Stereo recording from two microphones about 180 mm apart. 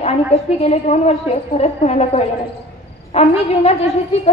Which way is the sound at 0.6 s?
35° left (ahead or behind).